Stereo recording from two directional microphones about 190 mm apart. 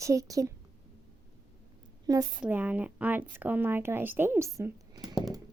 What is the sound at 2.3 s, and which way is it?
A woman's voice, 10° right (ahead or behind).